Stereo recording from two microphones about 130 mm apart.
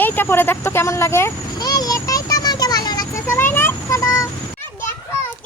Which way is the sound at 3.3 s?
15° left (ahead or behind).